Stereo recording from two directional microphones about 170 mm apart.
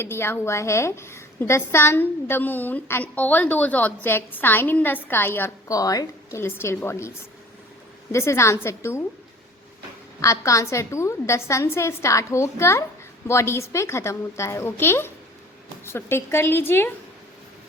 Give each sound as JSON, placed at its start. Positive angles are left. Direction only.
{"t": 0.0, "sound": "a woman's voice", "side_deg": 15}
{"t": 8.1, "sound": "a woman's voice", "side_deg": 15}
{"t": 10.2, "sound": "a woman's voice", "side_deg": 20}